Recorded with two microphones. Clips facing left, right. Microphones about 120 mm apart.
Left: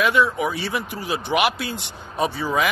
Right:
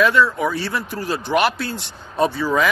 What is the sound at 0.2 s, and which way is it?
Speech, 20° left (ahead or behind).